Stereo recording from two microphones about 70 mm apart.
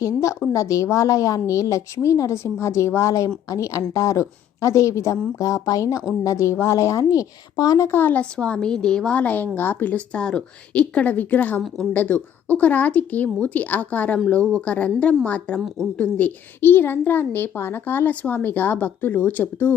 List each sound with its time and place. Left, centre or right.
0.0 s a woman's voice: left
7.9 s speech: left
8.1 s a woman's voice: centre